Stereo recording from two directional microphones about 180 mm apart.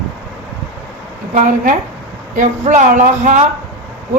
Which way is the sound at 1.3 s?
45° right (ahead or behind).